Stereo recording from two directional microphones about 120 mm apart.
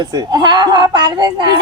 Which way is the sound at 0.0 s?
30° right (ahead or behind).